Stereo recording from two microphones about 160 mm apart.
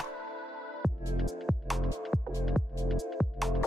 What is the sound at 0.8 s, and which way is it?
Music, centre (ahead or behind).